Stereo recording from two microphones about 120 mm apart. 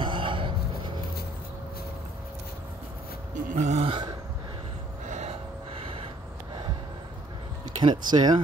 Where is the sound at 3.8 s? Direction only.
40° right (ahead or behind).